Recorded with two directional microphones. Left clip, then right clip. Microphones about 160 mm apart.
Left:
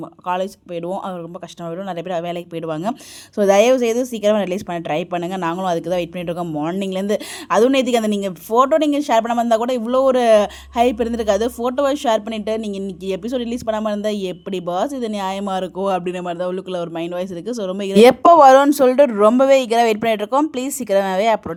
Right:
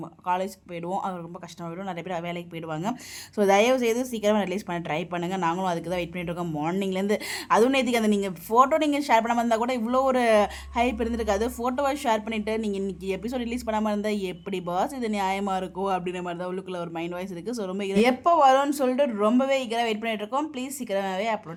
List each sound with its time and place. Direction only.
2.0 s a woman's voice: 30° left (ahead or behind)
17.9 s speech: 55° left (ahead or behind)